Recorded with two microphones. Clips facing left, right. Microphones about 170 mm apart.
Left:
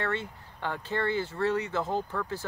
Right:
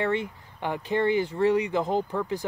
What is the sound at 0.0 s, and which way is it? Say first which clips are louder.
Speech: right 5 dB; 15° right (ahead or behind).